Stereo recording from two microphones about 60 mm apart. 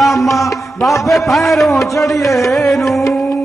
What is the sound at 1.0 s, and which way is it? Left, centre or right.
Speech, centre.